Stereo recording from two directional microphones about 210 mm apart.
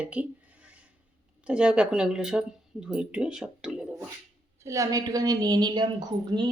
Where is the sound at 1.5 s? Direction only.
5° right (ahead or behind).